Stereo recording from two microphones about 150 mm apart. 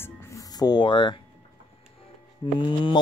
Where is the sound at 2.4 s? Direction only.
30° left (ahead or behind).